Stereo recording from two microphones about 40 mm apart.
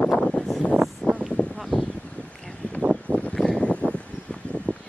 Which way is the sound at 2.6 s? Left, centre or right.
Left.